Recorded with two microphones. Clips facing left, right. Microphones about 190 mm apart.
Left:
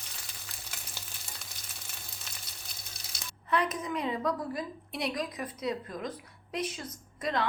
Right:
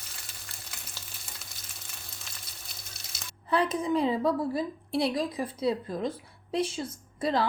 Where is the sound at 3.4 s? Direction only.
30° right (ahead or behind).